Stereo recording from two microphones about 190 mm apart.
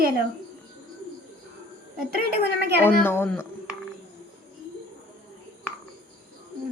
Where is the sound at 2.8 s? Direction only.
10° left (ahead or behind).